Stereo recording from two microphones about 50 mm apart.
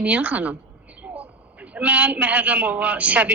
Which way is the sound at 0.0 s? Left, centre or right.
Right.